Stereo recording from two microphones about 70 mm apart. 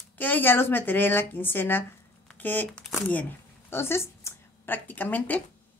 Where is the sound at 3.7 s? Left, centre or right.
Left.